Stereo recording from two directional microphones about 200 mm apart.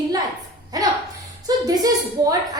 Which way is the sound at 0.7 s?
20° right (ahead or behind).